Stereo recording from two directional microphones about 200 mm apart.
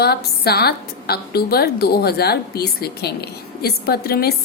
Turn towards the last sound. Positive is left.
turn(degrees=50)  # may be behind; listen again after turning